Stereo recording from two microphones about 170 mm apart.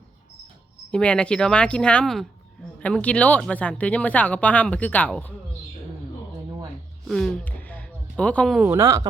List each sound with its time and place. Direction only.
0.9 s speech: 5° left (ahead or behind)
7.1 s a sound: 5° left (ahead or behind)
8.6 s a woman's voice: 15° right (ahead or behind)